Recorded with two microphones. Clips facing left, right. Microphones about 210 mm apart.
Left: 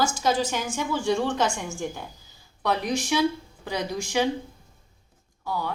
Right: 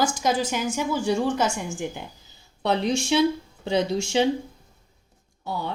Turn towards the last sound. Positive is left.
turn(degrees=-25)  # may be behind; listen again after turning